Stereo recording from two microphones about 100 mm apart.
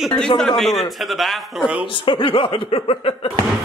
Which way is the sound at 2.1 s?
55° left (ahead or behind).